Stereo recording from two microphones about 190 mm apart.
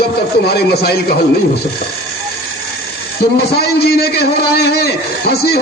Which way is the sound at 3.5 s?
55° left (ahead or behind).